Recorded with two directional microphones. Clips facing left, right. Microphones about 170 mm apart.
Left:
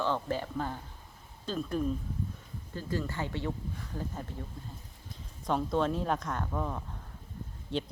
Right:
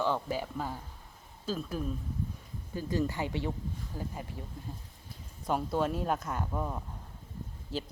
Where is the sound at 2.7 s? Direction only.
15° right (ahead or behind).